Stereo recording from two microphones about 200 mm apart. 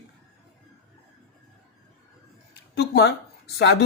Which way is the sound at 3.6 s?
60° left (ahead or behind).